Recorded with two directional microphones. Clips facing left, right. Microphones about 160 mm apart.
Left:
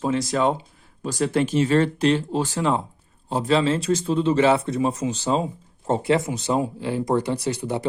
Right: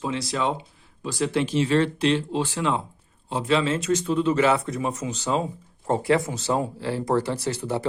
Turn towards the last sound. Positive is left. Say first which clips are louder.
# left 2 dB
turn(degrees=20)  # may be behind; listen again after turning